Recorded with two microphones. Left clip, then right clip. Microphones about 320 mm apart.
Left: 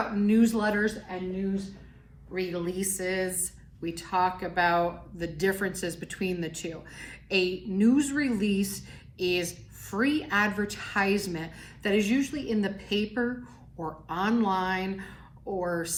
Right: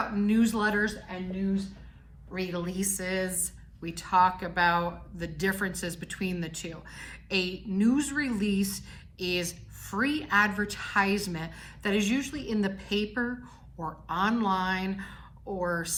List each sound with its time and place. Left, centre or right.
0.2 s a woman's voice: centre
2.3 s a woman's voice: centre